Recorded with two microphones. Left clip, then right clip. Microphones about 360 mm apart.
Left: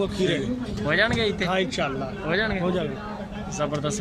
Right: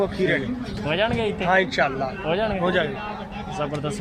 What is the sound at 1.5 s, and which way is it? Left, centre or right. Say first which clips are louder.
Speech: right 5 dB; right.